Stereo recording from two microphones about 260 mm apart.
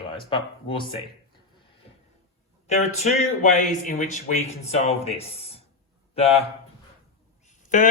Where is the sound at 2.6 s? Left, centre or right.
Left.